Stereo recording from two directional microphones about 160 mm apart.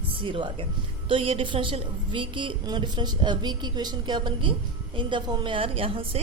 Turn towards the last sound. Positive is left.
turn(degrees=-35)  # may be behind; listen again after turning